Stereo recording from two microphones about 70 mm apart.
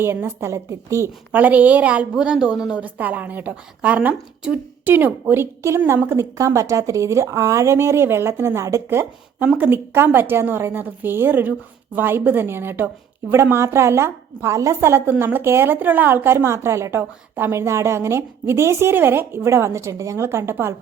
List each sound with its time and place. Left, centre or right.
0.3 s speech: right
1.3 s a woman's voice: right
2.1 s speech: centre
2.8 s a woman's voice: right
5.3 s a woman's voice: right
9.4 s a woman's voice: right